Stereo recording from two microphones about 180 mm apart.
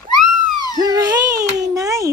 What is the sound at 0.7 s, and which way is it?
A child's voice, 20° right (ahead or behind).